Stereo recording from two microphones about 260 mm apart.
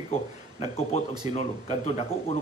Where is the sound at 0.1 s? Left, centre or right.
Left.